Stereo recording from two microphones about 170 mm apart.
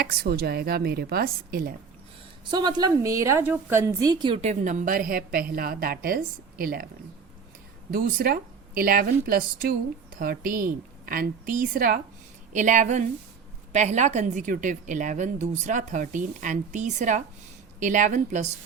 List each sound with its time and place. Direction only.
0.0 s a woman's voice: 65° right (ahead or behind)
2.4 s a woman's voice: 25° right (ahead or behind); by 6.8 s 60° right (ahead or behind)
7.9 s a woman's voice: 60° right (ahead or behind); by 18.4 s 45° right (ahead or behind)